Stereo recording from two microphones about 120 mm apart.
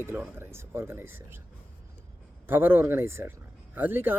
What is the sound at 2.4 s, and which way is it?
Speech, 15° right (ahead or behind).